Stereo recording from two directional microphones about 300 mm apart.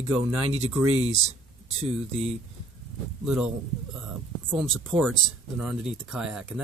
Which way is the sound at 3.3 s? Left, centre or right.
Centre.